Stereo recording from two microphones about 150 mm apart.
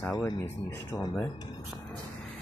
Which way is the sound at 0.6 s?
25° left (ahead or behind).